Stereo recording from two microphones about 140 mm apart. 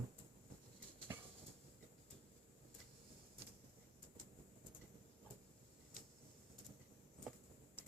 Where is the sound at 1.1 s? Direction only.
20° right (ahead or behind).